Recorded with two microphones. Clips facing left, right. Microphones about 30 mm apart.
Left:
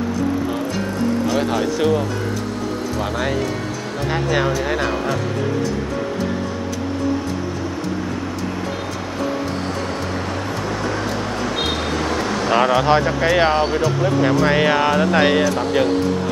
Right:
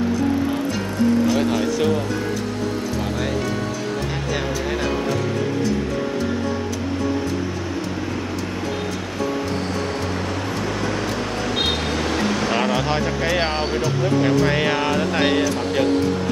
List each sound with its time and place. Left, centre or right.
1.3 s speech: centre
4.1 s speech: centre
10.7 s vehicle: centre
11.4 s a sound: centre
12.5 s speech: centre